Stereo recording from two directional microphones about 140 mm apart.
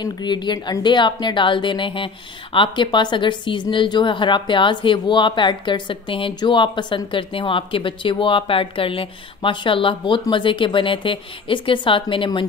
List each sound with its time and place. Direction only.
0.0 s speech: 30° left (ahead or behind)